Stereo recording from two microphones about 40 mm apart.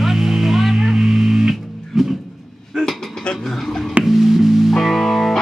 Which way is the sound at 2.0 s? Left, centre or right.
Centre.